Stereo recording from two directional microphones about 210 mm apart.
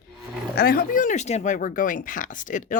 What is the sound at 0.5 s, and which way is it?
Speech, 45° left (ahead or behind).